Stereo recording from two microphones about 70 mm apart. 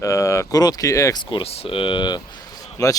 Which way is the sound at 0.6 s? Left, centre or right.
Left.